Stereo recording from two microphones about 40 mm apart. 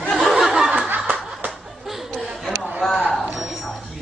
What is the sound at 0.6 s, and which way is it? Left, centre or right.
Snicker, right.